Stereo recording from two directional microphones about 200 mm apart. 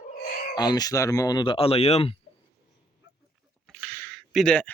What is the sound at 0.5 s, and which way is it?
Speech, 20° left (ahead or behind).